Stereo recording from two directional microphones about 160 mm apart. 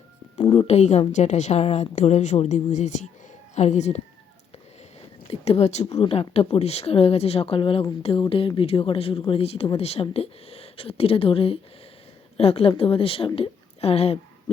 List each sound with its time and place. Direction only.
0.5 s a woman's voice: 40° left (ahead or behind)
5.3 s a woman's voice: 40° left (ahead or behind)